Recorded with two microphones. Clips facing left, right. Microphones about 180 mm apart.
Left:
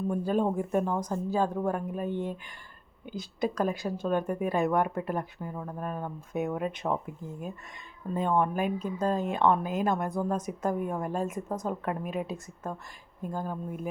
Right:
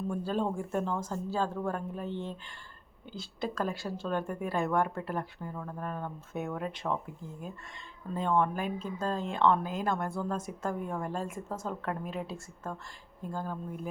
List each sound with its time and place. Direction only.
0.1 s speech: 15° left (ahead or behind)
8.1 s speech: 15° left (ahead or behind)